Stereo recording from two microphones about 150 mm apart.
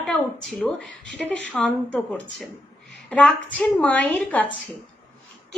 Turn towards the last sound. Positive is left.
turn(degrees=10)  # may be behind; listen again after turning